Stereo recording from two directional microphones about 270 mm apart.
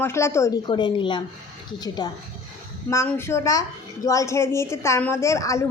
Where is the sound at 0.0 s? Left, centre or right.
Centre.